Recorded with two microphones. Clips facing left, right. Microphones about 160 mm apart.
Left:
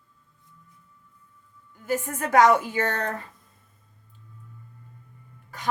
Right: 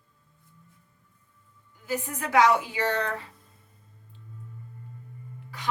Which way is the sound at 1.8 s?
50° left (ahead or behind).